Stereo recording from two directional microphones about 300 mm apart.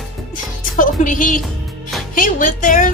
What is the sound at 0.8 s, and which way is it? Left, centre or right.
Speech, left.